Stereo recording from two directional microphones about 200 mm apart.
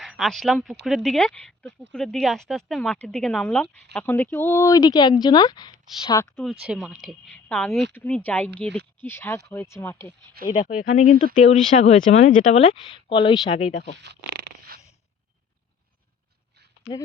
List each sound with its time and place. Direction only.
0.0 s speech: centre (ahead or behind); by 6.4 s 15° left (ahead or behind)
6.4 s speech: centre (ahead or behind)
10.4 s speech: 50° right (ahead or behind)
10.8 s speech: 40° left (ahead or behind)
14.0 s dog: 55° right (ahead or behind)